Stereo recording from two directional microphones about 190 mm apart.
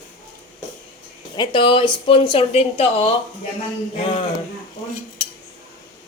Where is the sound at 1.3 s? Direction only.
25° left (ahead or behind).